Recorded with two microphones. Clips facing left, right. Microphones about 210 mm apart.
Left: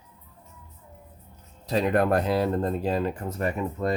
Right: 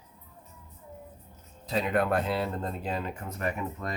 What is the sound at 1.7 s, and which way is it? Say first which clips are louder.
Speech: left 4 dB; 40° left (ahead or behind).